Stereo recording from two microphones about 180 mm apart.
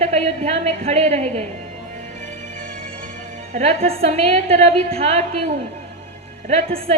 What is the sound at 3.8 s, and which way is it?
A woman's voice, 35° right (ahead or behind).